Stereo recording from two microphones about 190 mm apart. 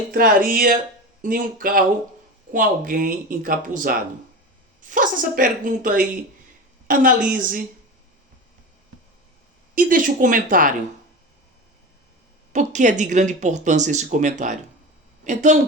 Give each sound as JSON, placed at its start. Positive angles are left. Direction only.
{"t": 0.1, "sound": "speech", "side_deg": -50}
{"t": 9.7, "sound": "speech", "side_deg": -45}
{"t": 12.5, "sound": "a woman's voice", "side_deg": -40}